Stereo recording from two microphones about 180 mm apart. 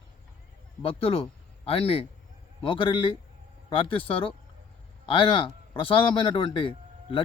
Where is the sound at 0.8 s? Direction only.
30° left (ahead or behind).